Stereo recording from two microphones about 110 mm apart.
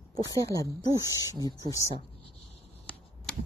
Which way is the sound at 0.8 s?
35° left (ahead or behind).